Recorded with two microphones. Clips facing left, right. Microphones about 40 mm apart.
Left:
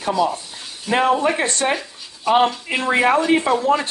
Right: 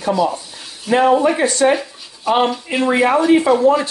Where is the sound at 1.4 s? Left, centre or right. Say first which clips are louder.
Right 6 dB; left.